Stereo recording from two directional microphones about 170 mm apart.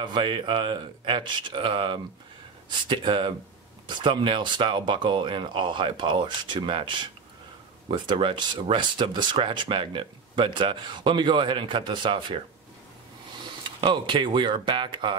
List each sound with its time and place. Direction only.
0.0 s speech: 30° right (ahead or behind)
13.7 s speech: 30° right (ahead or behind)